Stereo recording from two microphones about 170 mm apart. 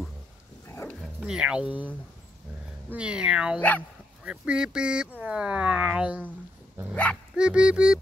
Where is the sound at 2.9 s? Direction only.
5° right (ahead or behind).